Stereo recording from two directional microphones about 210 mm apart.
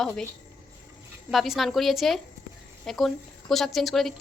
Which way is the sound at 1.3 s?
Centre (ahead or behind).